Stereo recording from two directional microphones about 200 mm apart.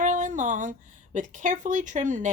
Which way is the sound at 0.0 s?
40° right (ahead or behind).